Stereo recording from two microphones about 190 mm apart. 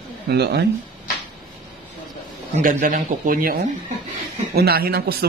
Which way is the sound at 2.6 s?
45° right (ahead or behind).